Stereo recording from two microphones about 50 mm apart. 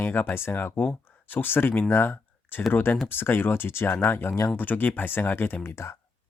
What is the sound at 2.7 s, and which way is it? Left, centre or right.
Speech, left.